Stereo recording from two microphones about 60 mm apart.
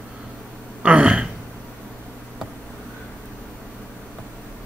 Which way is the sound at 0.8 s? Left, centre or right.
Centre.